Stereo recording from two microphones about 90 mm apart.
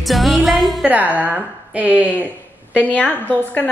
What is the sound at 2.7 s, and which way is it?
Speech, 10° left (ahead or behind).